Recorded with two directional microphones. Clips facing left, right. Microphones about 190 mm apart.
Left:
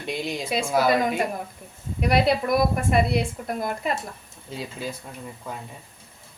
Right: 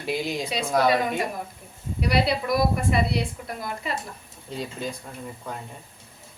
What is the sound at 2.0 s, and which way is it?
A woman's voice, 50° left (ahead or behind).